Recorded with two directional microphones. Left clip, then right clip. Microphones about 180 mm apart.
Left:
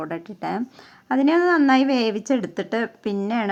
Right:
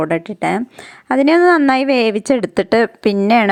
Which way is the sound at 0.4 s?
30° right (ahead or behind).